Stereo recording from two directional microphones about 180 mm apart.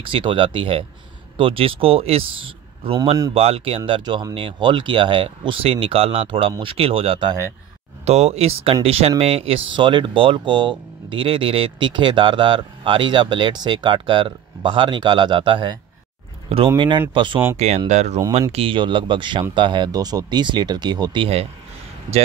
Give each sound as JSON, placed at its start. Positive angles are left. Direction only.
{"t": 0.0, "sound": "speech", "side_deg": -30}
{"t": 17.6, "sound": "speech", "side_deg": -35}